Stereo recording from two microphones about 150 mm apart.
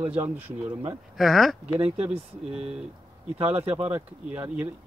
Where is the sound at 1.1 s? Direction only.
Centre (ahead or behind).